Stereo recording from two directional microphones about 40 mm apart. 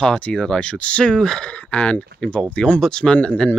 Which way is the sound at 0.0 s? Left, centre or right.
Left.